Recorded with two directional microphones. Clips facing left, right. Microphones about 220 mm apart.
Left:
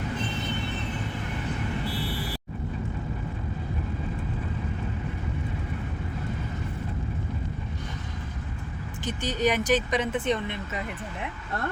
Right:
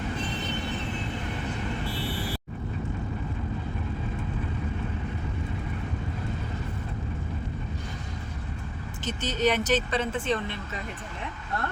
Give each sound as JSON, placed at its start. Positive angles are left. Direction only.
{"t": 9.0, "sound": "speech", "side_deg": 10}